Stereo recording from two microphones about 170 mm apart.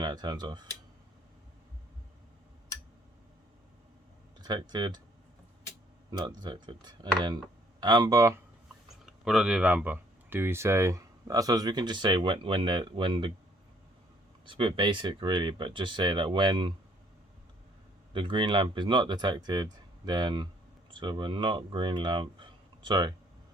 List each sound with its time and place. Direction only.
0.0 s speech: 25° right (ahead or behind)
4.4 s speech: 25° right (ahead or behind)
6.1 s speech: 25° right (ahead or behind)
9.2 s speech: 5° right (ahead or behind); by 13.3 s 30° right (ahead or behind)
14.4 s speech: 30° right (ahead or behind)
18.1 s speech: 30° right (ahead or behind)